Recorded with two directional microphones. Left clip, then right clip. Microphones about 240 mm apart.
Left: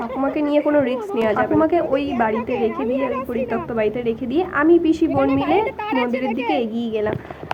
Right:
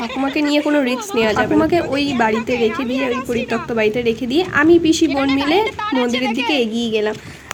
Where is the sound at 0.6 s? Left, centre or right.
Right.